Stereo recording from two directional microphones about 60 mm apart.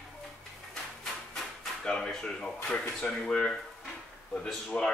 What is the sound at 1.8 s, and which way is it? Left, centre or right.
A man's voice, centre.